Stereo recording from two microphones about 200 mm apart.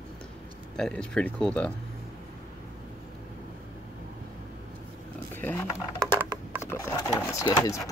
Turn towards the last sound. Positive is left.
turn(degrees=15)  # may be behind; listen again after turning